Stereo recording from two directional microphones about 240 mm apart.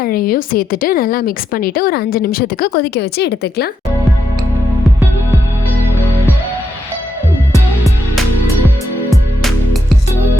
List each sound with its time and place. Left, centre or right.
0.0 s a woman's voice: left